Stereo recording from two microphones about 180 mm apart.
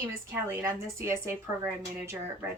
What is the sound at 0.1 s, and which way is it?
A woman's voice, 15° right (ahead or behind).